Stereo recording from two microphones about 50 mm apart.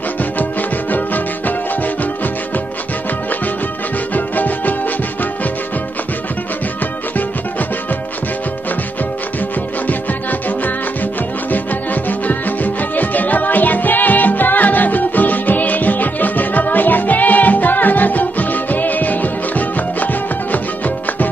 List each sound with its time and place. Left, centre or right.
0.2 s music: left
4.1 s music: left
11.5 s music: left